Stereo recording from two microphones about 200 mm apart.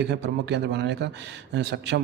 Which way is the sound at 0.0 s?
60° right (ahead or behind).